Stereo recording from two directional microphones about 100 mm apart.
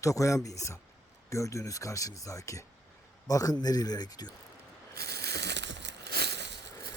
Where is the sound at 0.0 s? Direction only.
30° left (ahead or behind).